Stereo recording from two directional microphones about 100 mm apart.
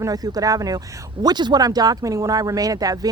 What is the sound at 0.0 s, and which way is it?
Speech, 40° right (ahead or behind).